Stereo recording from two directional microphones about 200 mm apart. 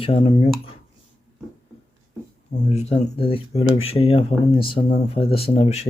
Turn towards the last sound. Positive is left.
turn(degrees=35)  # may be behind; listen again after turning